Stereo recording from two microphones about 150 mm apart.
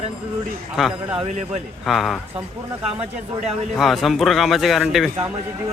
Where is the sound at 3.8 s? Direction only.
Centre (ahead or behind).